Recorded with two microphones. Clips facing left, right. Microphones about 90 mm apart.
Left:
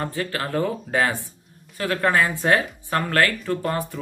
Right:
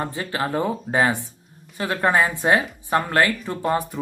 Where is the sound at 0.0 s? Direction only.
20° right (ahead or behind).